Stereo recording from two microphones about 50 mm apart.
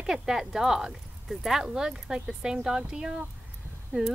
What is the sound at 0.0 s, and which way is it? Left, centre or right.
A child's voice, centre.